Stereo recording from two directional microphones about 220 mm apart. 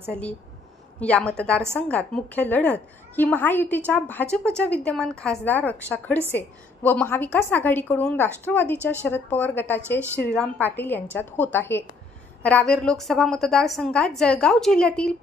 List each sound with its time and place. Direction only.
0.1 s a woman's voice: 5° left (ahead or behind)